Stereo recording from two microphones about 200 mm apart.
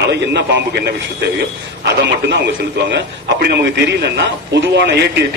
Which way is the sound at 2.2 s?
55° right (ahead or behind).